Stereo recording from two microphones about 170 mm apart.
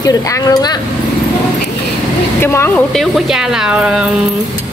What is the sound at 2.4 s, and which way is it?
Speech, 15° left (ahead or behind).